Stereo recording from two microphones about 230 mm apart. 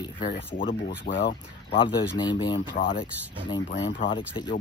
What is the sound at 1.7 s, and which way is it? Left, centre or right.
Speech, left.